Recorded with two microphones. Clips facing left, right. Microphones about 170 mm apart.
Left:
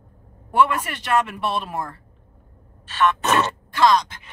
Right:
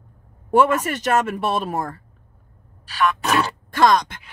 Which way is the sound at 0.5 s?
45° right (ahead or behind).